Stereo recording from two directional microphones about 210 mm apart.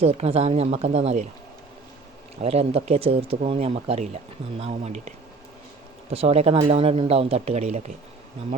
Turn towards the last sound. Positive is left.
turn(degrees=-35)  # may be behind; listen again after turning